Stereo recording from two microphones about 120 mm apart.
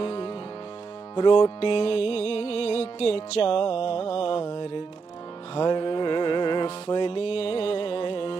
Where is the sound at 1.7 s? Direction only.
55° left (ahead or behind).